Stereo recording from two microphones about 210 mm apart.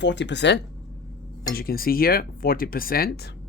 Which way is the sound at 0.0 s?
55° left (ahead or behind).